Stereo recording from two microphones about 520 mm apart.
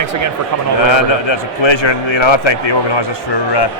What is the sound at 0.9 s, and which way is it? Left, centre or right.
A man's voice, left.